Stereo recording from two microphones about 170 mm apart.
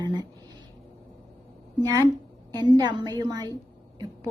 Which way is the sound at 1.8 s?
20° right (ahead or behind).